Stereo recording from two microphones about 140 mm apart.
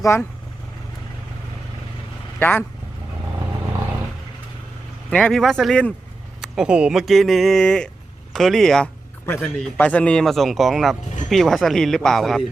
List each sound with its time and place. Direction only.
0.0 s speech: 20° left (ahead or behind)
2.4 s speech: 15° left (ahead or behind)
5.1 s speech: 5° left (ahead or behind)
6.4 s speech: 5° right (ahead or behind)